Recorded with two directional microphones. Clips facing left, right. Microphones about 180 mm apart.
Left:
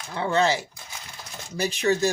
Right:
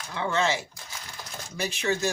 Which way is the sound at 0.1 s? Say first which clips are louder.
Left 4 dB; 35° left (ahead or behind).